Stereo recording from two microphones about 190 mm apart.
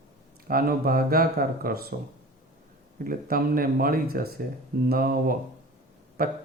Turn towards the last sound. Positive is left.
turn(degrees=-50)  # may be behind; listen again after turning